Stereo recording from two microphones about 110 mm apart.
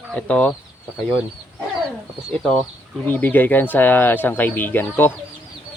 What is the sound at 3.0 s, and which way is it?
Speech, 15° left (ahead or behind).